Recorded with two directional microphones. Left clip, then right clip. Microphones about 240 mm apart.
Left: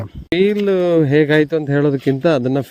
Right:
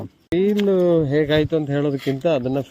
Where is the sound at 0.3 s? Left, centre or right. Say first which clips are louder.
Left 3 dB; left.